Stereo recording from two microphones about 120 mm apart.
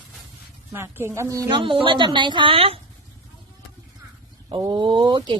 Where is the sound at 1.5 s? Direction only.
45° right (ahead or behind).